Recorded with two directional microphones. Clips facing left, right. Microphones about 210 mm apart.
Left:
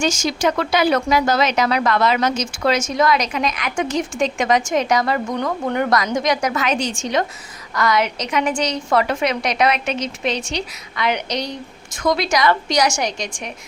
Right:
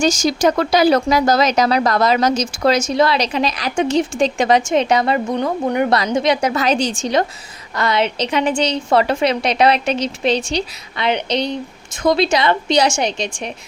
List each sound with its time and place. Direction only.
0.0 s speech: 35° right (ahead or behind); by 5.9 s 20° right (ahead or behind)
5.9 s a woman's voice: 30° right (ahead or behind)